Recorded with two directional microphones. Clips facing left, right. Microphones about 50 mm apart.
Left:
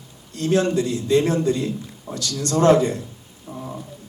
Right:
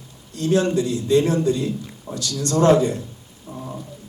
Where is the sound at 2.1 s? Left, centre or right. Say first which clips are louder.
Even; centre.